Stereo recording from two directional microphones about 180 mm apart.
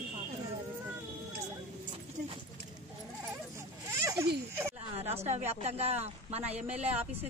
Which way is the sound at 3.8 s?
15° right (ahead or behind).